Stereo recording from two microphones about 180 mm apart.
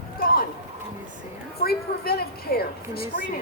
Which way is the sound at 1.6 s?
60° left (ahead or behind).